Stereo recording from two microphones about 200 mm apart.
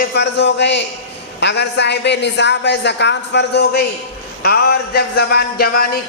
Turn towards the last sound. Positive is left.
turn(degrees=50)  # may be behind; listen again after turning